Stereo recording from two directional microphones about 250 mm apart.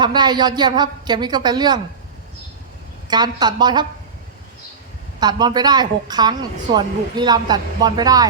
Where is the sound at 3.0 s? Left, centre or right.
Centre.